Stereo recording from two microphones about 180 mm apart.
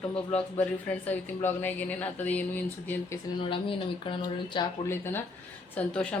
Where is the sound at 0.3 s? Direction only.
35° left (ahead or behind).